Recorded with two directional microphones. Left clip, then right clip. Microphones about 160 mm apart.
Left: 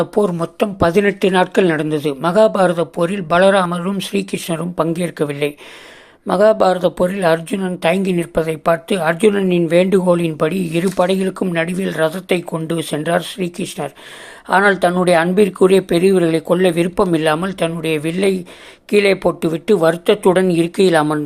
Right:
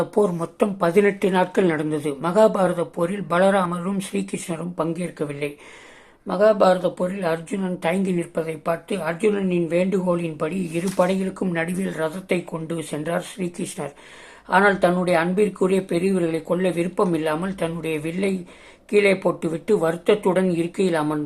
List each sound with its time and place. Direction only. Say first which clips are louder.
0.0 s speech: left 4 dB; 25° left (ahead or behind)
11.4 s speech: left 6 dB; 25° left (ahead or behind)